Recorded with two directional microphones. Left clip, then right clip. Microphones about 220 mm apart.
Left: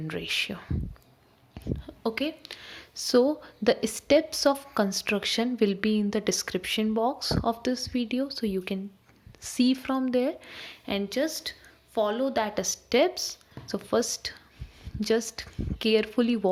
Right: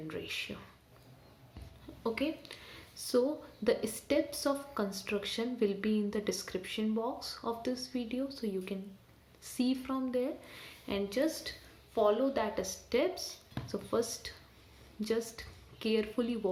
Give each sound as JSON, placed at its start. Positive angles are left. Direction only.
{"t": 0.1, "sound": "speech", "side_deg": 45}
{"t": 1.6, "sound": "a sound", "side_deg": 40}
{"t": 2.0, "sound": "speech", "side_deg": 40}